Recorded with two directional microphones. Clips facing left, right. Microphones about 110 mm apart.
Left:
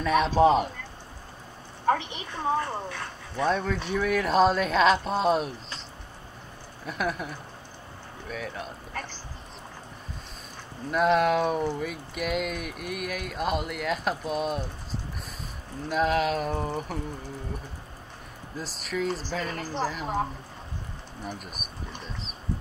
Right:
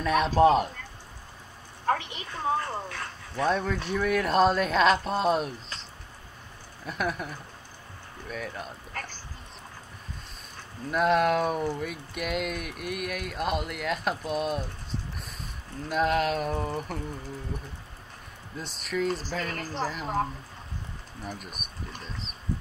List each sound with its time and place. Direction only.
0.0 s speech: centre (ahead or behind)
2.0 s a woman's voice: 20° left (ahead or behind)
3.4 s speech: centre (ahead or behind)
6.9 s speech: centre (ahead or behind)
10.9 s speech: centre (ahead or behind)
18.6 s speech: centre (ahead or behind)
21.3 s speech: centre (ahead or behind)